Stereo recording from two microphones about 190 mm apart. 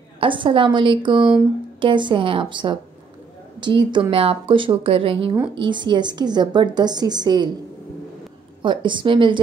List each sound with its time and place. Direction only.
0.2 s a woman's voice: 25° right (ahead or behind)
8.6 s a woman's voice: 25° right (ahead or behind)